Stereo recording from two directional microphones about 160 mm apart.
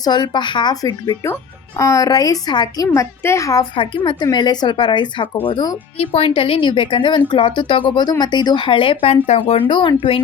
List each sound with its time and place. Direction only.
0.0 s speech: 25° left (ahead or behind)